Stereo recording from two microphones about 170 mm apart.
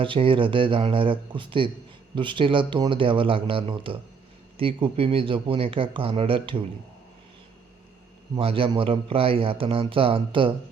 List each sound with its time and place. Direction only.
0.0 s a man's voice: 30° right (ahead or behind)
8.4 s a man's voice: 35° right (ahead or behind)